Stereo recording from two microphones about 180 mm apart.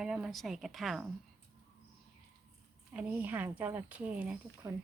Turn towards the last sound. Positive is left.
turn(degrees=-20)  # may be behind; listen again after turning